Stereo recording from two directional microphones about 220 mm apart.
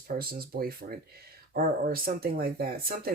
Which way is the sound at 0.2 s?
45° right (ahead or behind).